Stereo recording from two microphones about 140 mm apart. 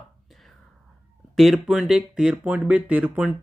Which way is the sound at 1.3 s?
Centre (ahead or behind).